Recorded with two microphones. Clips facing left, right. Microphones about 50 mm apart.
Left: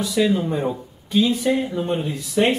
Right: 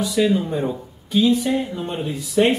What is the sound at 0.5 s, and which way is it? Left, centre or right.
Speech, centre.